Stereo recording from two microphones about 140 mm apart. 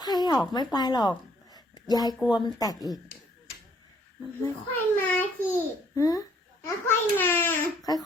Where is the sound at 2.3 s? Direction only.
30° left (ahead or behind).